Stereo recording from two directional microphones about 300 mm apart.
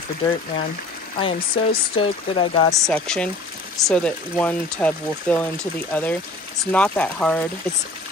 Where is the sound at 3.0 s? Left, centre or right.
Centre.